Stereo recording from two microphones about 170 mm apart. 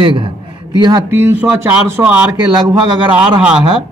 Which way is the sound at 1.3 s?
10° right (ahead or behind).